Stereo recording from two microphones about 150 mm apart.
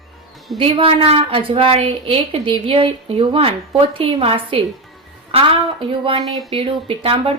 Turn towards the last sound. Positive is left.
turn(degrees=-35)  # may be behind; listen again after turning